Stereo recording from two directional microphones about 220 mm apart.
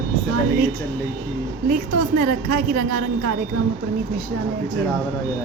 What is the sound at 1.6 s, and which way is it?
A woman's voice, 40° right (ahead or behind).